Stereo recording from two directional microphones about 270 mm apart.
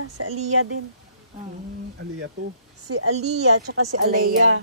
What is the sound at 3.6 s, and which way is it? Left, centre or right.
Speech, right.